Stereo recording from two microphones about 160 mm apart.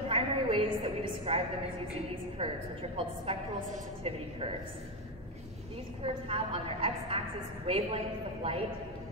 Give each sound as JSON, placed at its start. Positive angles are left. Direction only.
{"t": 0.1, "sound": "a sound", "side_deg": -35}
{"t": 2.0, "sound": "a woman's voice", "side_deg": -40}
{"t": 6.2, "sound": "a woman's voice", "side_deg": -35}